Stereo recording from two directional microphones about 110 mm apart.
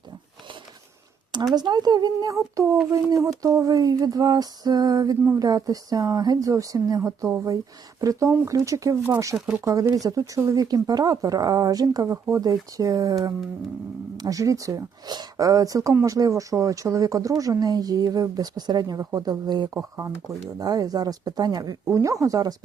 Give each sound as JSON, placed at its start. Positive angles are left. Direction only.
{"t": 1.5, "sound": "speech", "side_deg": -40}
{"t": 2.3, "sound": "speech", "side_deg": -25}
{"t": 9.0, "sound": "speech", "side_deg": -20}